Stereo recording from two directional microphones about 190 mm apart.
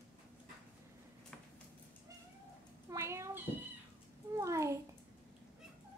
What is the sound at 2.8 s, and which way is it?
Cat, 15° right (ahead or behind).